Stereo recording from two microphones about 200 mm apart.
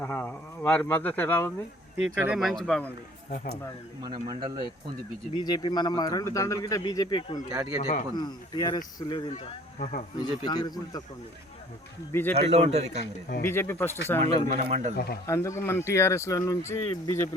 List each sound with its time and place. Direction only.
0.0 s speech: 10° left (ahead or behind)
2.2 s speech: 5° right (ahead or behind)
4.0 s a man's voice: 25° right (ahead or behind)
5.4 s speech: 20° left (ahead or behind)
7.5 s a man's voice: 10° right (ahead or behind)
8.1 s speech: 20° left (ahead or behind)
9.7 s speech: 40° left (ahead or behind)
10.2 s speech: 20° left (ahead or behind)
12.1 s speech: 10° left (ahead or behind)
12.5 s speech: 30° right (ahead or behind)
13.4 s speech: 10° left (ahead or behind)
14.3 s speech: 35° right (ahead or behind)
14.9 s speech: 50° left (ahead or behind)
15.3 s speech: 15° left (ahead or behind)